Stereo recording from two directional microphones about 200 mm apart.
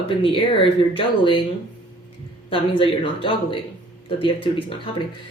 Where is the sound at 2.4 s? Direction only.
25° left (ahead or behind).